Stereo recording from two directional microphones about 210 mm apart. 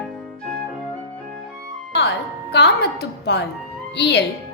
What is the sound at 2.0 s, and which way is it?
Music, 55° left (ahead or behind).